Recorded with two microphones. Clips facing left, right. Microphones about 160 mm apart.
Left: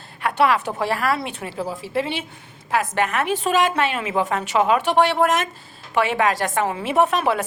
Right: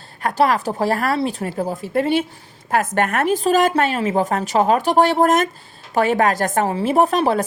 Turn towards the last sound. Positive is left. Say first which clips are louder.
# right 3 dB
turn(degrees=-35)  # may be behind; listen again after turning